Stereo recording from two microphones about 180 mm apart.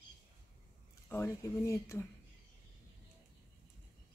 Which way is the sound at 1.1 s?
15° left (ahead or behind).